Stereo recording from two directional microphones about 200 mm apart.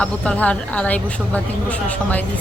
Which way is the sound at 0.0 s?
5° left (ahead or behind).